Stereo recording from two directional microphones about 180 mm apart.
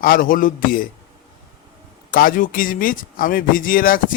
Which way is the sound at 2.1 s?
50° left (ahead or behind).